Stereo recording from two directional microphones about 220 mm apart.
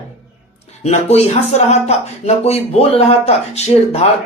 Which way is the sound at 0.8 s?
30° left (ahead or behind).